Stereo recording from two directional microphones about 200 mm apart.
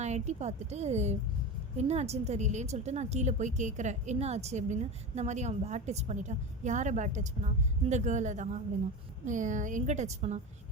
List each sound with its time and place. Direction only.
0.0 s a woman's voice: 35° right (ahead or behind)